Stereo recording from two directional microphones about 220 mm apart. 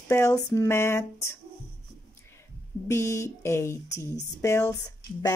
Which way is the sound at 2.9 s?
15° left (ahead or behind).